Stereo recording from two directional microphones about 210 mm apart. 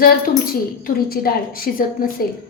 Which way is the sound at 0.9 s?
45° left (ahead or behind).